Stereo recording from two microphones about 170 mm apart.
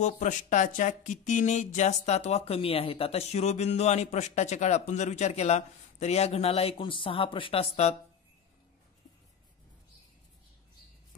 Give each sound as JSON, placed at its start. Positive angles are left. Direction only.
{"t": 0.0, "sound": "speech", "side_deg": 50}